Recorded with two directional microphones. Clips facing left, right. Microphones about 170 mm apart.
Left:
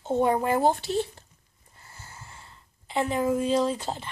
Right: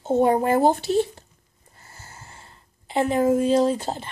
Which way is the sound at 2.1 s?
40° right (ahead or behind).